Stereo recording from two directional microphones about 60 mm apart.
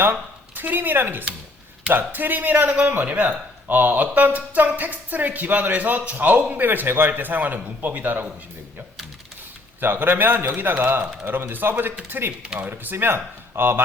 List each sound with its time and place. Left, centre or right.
0.0 s a man's voice: right
9.8 s a man's voice: right